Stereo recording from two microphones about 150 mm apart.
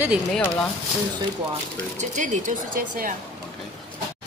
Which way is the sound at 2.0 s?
55° right (ahead or behind).